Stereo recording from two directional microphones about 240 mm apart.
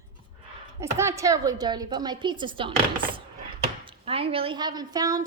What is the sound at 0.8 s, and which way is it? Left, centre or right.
Speech, centre.